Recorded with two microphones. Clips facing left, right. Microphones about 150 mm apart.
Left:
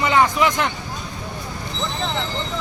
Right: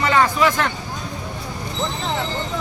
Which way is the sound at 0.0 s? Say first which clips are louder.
Even; 15° left (ahead or behind).